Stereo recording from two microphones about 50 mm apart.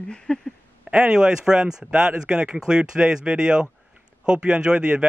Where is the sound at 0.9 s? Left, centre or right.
Centre.